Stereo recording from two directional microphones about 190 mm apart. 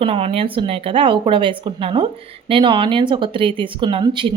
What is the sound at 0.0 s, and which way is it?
Speech, 30° right (ahead or behind).